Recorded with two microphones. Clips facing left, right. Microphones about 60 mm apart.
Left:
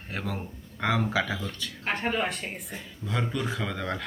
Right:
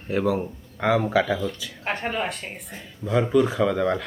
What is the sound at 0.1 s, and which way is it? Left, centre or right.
Speech, centre.